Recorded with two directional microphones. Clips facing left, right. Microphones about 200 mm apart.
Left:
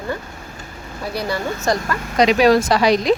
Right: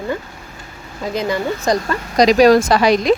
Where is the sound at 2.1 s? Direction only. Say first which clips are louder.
Right 3 dB; 40° right (ahead or behind).